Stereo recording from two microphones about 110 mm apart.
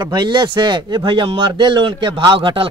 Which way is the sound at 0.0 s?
45° right (ahead or behind).